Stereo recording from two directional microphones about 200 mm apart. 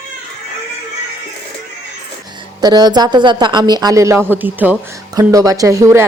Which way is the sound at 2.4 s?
20° right (ahead or behind).